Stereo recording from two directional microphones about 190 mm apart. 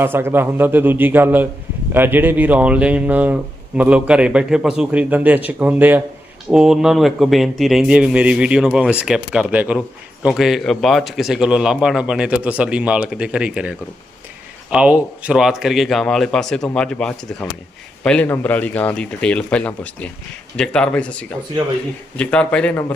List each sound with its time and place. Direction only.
0.0 s a man's voice: 10° right (ahead or behind); by 22.8 s 5° left (ahead or behind)